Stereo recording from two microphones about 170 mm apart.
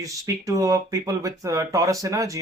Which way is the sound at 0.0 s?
20° right (ahead or behind).